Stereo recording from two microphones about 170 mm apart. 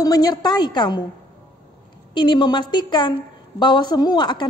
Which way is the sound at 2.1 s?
25° left (ahead or behind).